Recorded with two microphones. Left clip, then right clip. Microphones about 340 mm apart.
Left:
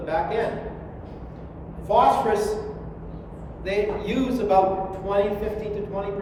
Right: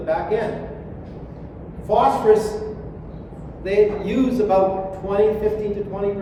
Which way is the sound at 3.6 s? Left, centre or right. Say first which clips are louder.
Right 7 dB; centre.